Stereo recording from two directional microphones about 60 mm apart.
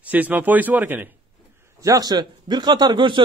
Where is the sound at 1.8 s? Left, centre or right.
Right.